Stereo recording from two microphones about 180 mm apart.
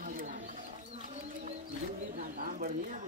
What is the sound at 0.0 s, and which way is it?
Wild animals, 50° right (ahead or behind).